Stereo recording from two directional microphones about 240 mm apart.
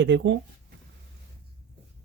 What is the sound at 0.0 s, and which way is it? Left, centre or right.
Speech, right.